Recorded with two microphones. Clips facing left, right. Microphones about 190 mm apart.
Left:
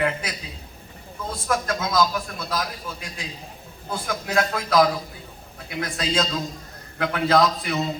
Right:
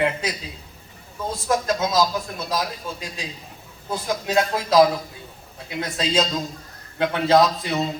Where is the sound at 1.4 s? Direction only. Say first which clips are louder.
Right 3 dB; 25° right (ahead or behind).